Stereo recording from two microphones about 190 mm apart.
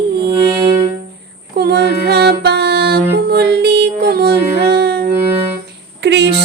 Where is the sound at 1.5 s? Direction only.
60° right (ahead or behind).